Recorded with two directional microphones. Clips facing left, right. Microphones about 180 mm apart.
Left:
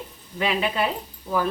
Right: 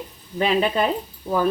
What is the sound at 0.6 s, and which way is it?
Speech, 40° right (ahead or behind).